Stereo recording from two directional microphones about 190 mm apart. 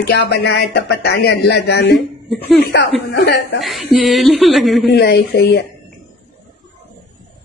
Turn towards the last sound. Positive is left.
turn(degrees=60)  # may be behind; listen again after turning